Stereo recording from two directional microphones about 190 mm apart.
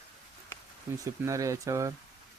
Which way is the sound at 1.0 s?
15° right (ahead or behind).